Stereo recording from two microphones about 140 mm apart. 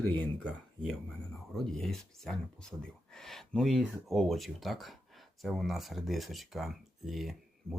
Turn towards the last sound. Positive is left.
turn(degrees=-20)  # may be behind; listen again after turning